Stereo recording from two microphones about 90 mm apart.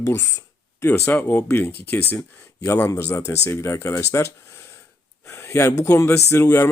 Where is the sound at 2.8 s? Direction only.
25° left (ahead or behind).